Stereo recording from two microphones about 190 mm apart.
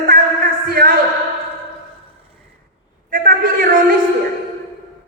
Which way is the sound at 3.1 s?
50° right (ahead or behind).